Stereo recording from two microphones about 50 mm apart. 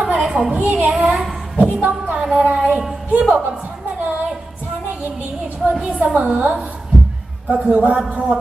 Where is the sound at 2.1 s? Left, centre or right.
Centre.